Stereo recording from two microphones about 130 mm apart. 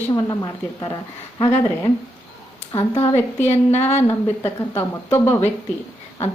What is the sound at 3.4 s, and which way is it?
Speech, 60° left (ahead or behind).